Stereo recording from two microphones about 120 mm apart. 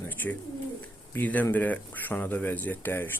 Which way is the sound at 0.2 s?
15° left (ahead or behind).